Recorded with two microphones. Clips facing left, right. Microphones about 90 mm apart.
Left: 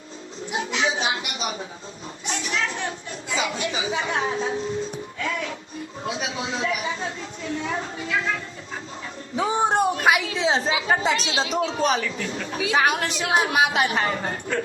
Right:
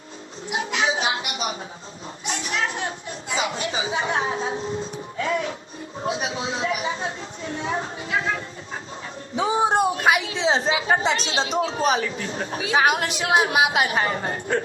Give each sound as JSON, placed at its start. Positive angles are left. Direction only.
{"t": 0.7, "sound": "speech", "side_deg": -30}
{"t": 5.1, "sound": "music", "side_deg": -35}
{"t": 6.1, "sound": "speech", "side_deg": -35}
{"t": 9.3, "sound": "speech", "side_deg": 0}
{"t": 10.2, "sound": "speech", "side_deg": -35}
{"t": 13.5, "sound": "speech", "side_deg": 35}
{"t": 13.9, "sound": "speech", "side_deg": -35}